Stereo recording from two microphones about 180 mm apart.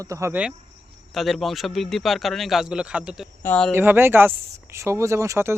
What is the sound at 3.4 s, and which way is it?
Speech, 10° left (ahead or behind).